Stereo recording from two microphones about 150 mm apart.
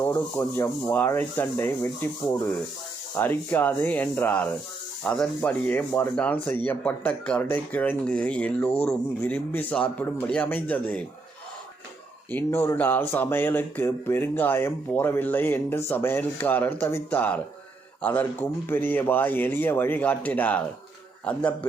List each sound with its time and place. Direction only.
0.0 s speech: 15° left (ahead or behind)
12.3 s speech: 15° left (ahead or behind)